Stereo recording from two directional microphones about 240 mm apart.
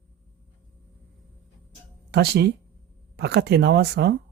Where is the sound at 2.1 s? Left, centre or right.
Right.